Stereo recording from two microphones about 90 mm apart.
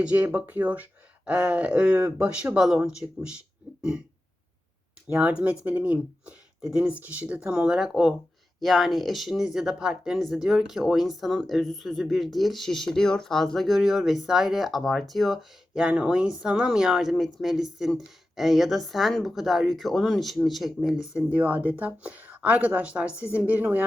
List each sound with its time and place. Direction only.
0.0 s speech: 15° right (ahead or behind)
2.2 s speech: 10° right (ahead or behind)
5.1 s speech: 15° right (ahead or behind)
21.3 s speech: 15° right (ahead or behind)